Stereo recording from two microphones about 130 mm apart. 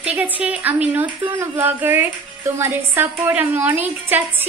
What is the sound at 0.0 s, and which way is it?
Speech, 10° right (ahead or behind).